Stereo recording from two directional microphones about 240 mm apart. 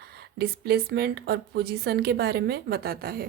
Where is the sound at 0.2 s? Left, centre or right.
Right.